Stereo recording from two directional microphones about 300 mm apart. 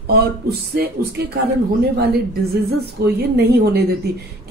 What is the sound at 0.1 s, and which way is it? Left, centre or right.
Speech, right.